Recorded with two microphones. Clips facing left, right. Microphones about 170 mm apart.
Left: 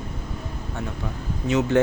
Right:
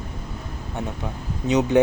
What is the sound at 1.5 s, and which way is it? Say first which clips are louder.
Speech: right 2 dB; 15° right (ahead or behind).